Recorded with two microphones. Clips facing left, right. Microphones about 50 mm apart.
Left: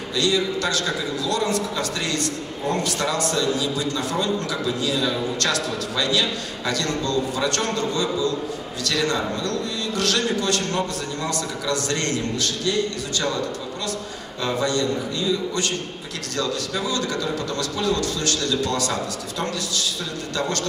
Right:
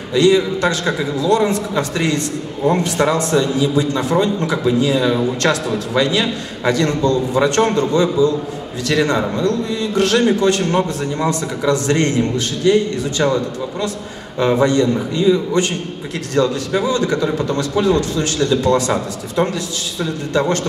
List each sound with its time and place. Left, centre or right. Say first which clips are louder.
0.1 s a man's voice: right 9 dB; right